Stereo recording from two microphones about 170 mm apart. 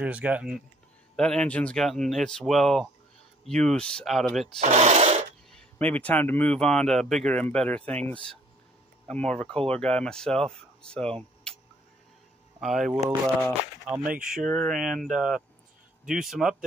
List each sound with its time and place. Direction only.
0.0 s speech: 10° right (ahead or behind)
1.1 s speech: 5° left (ahead or behind)
4.6 s rub: 40° right (ahead or behind)
5.5 s speech: 10° left (ahead or behind)
12.5 s speech: centre (ahead or behind)
14.0 s speech: 55° right (ahead or behind)
14.3 s speech: centre (ahead or behind)